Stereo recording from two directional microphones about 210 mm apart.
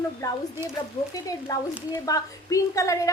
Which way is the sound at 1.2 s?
15° left (ahead or behind).